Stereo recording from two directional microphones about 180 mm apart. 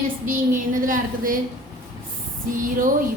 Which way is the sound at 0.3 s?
50° right (ahead or behind).